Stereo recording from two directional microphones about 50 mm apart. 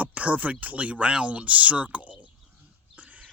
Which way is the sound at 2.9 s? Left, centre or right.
Right.